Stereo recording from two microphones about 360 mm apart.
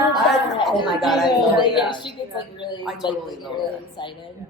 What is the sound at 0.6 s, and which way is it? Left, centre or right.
Speech, centre.